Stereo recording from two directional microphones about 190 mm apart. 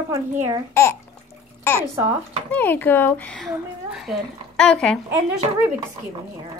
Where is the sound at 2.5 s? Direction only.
10° left (ahead or behind).